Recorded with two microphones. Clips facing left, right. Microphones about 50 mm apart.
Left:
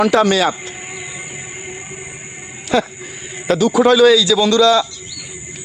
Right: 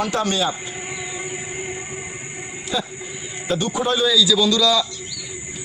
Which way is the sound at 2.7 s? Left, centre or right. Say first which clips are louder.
Left 9 dB; left.